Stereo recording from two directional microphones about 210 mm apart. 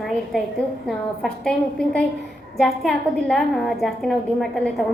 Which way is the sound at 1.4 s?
5° left (ahead or behind).